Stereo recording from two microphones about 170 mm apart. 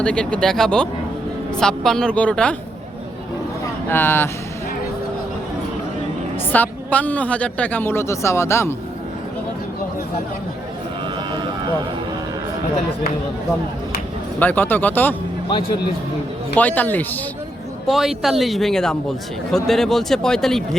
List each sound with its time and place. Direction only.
0.0 s speech: 5° left (ahead or behind)
3.8 s a woman's voice: 15° left (ahead or behind)
6.5 s a woman's voice: 10° left (ahead or behind)
14.3 s a woman's voice: 10° left (ahead or behind)
15.4 s speech: 25° left (ahead or behind)
16.6 s a woman's voice: 10° left (ahead or behind)
17.8 s speech: centre (ahead or behind)